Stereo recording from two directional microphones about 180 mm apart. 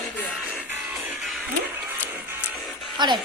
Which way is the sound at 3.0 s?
25° right (ahead or behind).